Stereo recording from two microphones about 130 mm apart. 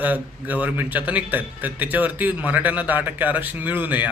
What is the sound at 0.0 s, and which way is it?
Speech, 15° right (ahead or behind).